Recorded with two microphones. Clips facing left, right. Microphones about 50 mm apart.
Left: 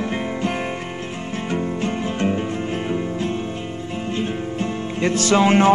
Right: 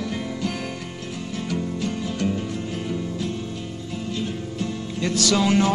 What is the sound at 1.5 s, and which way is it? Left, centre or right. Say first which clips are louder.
Music: left 4 dB; left.